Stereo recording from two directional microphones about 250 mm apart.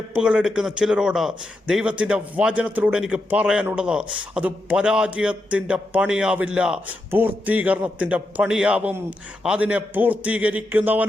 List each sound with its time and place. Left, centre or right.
0.1 s a man's voice: centre